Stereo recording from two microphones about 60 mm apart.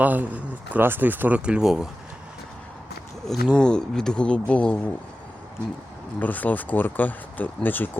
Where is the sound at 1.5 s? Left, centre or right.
Centre.